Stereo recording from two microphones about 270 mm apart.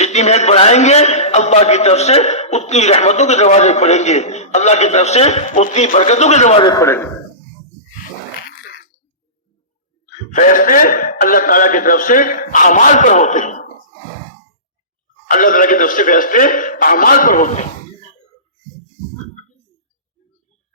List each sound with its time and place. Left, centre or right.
0.0 s a man's voice: left; by 7.1 s centre
8.4 s a sound: left
10.3 s a man's voice: left
15.3 s a man's voice: left